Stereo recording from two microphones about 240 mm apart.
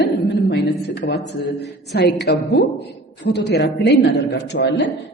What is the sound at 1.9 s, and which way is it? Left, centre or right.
A woman's voice, left.